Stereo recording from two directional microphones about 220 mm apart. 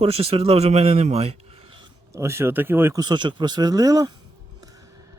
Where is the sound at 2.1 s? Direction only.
10° right (ahead or behind).